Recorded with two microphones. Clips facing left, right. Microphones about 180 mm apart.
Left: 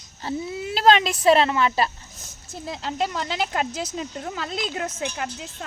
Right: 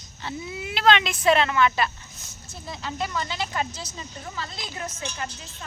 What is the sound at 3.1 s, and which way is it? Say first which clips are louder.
Speech: left 3 dB; 70° left (ahead or behind).